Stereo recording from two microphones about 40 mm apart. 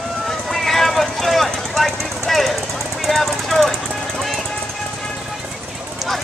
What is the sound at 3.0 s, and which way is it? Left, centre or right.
Jackhammer, centre.